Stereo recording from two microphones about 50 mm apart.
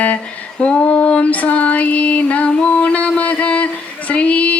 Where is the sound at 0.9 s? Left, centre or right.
Left.